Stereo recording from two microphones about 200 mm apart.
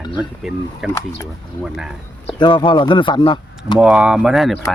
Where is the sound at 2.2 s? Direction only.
25° left (ahead or behind).